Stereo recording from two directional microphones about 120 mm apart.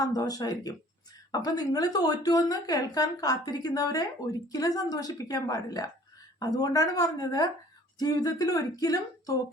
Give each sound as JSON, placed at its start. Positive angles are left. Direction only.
{"t": 0.0, "sound": "speech", "side_deg": 30}